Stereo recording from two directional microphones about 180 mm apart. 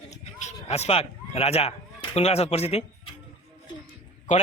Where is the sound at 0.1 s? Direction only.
40° left (ahead or behind).